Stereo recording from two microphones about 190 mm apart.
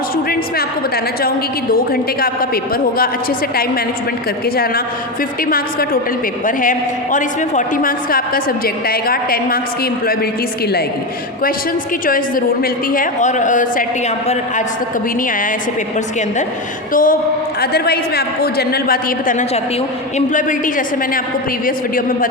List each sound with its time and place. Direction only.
1.7 s a man's voice: 50° left (ahead or behind)
12.0 s a man's voice: 45° left (ahead or behind)
16.9 s a man's voice: 45° left (ahead or behind)